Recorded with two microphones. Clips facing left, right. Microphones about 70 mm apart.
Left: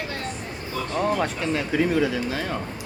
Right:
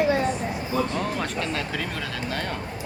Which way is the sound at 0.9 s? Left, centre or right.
Centre.